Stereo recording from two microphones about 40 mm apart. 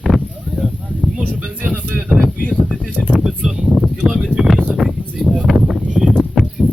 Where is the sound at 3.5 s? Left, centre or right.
Centre.